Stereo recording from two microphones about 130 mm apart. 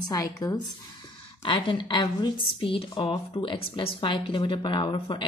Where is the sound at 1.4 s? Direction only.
40° left (ahead or behind).